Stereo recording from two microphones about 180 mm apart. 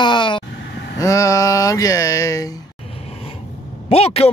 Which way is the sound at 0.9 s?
20° left (ahead or behind).